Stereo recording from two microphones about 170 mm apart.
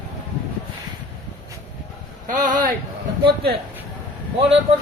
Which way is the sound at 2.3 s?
50° right (ahead or behind).